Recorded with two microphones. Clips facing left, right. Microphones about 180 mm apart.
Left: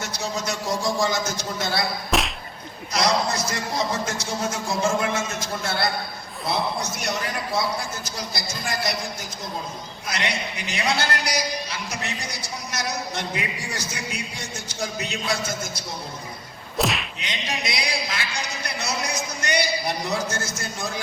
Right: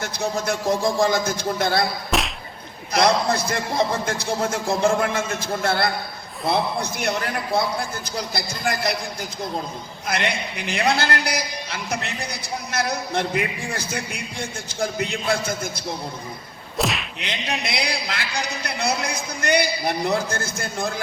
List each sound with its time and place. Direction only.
0.0 s a man's voice: 55° right (ahead or behind)
2.0 s a sound: centre (ahead or behind)
2.9 s a man's voice: 55° right (ahead or behind)
10.1 s a man's voice: 55° right (ahead or behind)
16.7 s whip: centre (ahead or behind)
17.2 s a man's voice: 60° right (ahead or behind)